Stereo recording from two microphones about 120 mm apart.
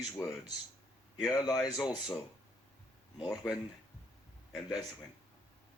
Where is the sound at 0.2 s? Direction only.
25° left (ahead or behind).